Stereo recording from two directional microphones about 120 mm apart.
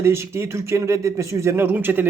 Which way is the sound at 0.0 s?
20° right (ahead or behind).